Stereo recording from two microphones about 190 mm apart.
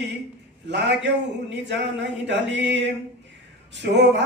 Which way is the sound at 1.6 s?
65° right (ahead or behind).